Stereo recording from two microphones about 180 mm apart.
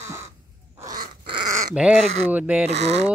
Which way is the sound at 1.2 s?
25° right (ahead or behind).